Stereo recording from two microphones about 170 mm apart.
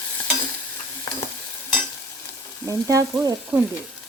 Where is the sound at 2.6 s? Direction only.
20° right (ahead or behind).